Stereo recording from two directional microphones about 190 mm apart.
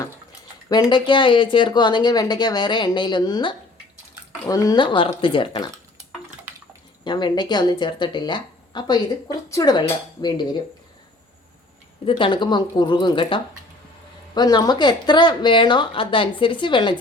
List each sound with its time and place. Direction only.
0.7 s speech: 25° left (ahead or behind)
7.0 s speech: 25° left (ahead or behind)
12.0 s speech: 25° left (ahead or behind)